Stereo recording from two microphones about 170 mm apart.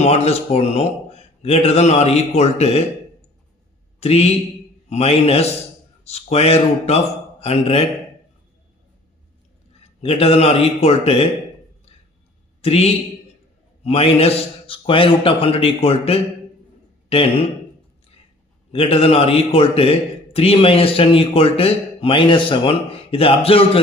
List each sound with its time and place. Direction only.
0.0 s a man's voice: 35° left (ahead or behind)
4.0 s a man's voice: 40° left (ahead or behind)
9.8 s a man's voice: 35° left (ahead or behind)
12.6 s a man's voice: 35° left (ahead or behind)
18.7 s a man's voice: 35° left (ahead or behind)